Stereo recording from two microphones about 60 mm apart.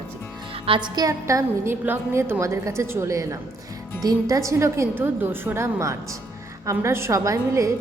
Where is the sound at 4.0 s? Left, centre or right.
Right.